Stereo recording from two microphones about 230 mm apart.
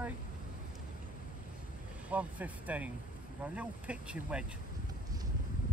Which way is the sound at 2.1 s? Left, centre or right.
Centre.